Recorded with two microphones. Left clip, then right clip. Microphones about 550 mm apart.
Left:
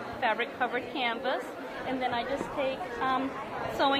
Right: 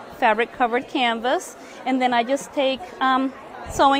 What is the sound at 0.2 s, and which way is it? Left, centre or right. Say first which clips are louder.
A woman's voice: right 10 dB; right.